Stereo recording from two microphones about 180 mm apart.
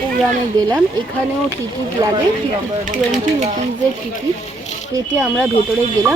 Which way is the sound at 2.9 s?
45° right (ahead or behind).